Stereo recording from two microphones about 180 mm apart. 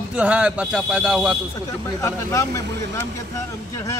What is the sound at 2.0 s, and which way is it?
Speech, 15° left (ahead or behind).